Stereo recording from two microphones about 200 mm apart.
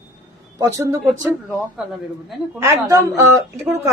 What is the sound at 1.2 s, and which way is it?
Speech, centre (ahead or behind).